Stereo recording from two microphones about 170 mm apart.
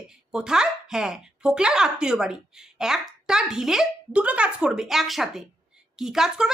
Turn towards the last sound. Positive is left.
turn(degrees=-5)  # may be behind; listen again after turning